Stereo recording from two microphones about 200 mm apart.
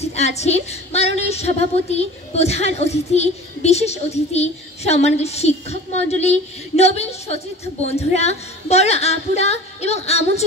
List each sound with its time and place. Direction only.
0.0 s a woman's voice: 35° left (ahead or behind)